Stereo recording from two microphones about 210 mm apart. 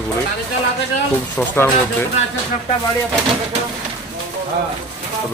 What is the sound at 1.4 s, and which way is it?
Speech, 5° left (ahead or behind).